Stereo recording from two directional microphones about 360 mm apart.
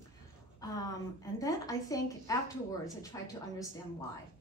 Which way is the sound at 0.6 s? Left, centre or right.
Centre.